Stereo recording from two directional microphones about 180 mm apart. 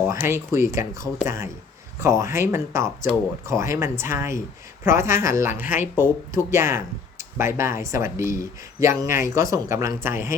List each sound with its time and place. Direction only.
0.1 s speech: 15° right (ahead or behind)